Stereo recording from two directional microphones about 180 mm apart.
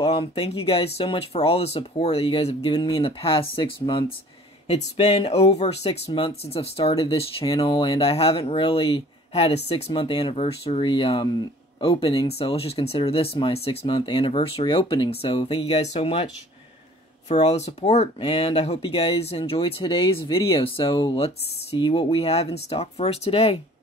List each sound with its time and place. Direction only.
0.0 s speech: 35° left (ahead or behind)
17.3 s speech: 40° left (ahead or behind)